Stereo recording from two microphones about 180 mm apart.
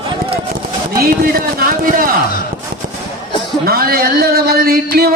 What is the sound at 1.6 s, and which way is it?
Speech, 50° right (ahead or behind).